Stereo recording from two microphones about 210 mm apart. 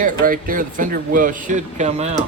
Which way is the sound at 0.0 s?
40° right (ahead or behind).